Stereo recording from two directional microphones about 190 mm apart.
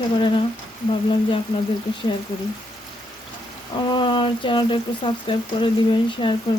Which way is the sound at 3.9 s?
25° left (ahead or behind).